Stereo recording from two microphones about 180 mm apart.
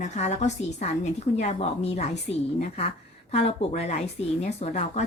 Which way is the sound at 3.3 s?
35° left (ahead or behind).